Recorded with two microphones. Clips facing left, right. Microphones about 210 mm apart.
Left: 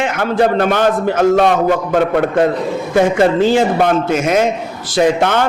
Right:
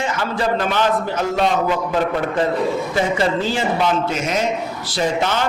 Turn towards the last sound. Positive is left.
turn(degrees=55)  # may be behind; listen again after turning